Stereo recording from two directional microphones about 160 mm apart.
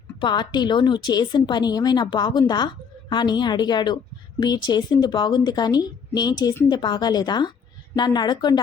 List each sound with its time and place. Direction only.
0.2 s a woman's voice: 30° left (ahead or behind)